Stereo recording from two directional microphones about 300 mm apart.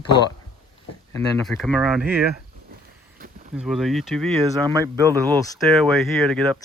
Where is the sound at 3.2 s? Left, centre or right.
Right.